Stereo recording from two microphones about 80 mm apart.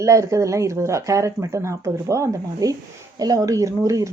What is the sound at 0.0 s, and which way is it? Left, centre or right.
Speech, right.